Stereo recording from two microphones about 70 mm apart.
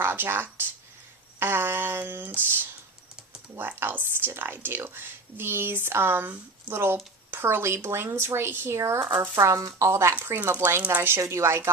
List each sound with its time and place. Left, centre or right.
0.0 s speech: right
1.4 s a sound: right
3.5 s speech: right
9.0 s speech: right
9.4 s speech: right
10.9 s speech: right